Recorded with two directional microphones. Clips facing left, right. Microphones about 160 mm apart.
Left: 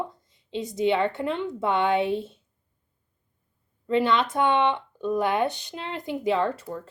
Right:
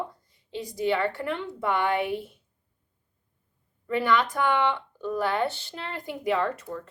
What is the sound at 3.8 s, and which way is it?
A woman's voice, 25° left (ahead or behind).